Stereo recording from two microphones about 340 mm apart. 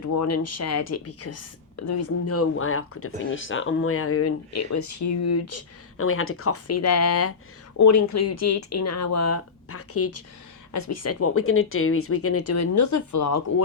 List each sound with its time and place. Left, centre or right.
0.0 s speech: left
7.8 s speech: left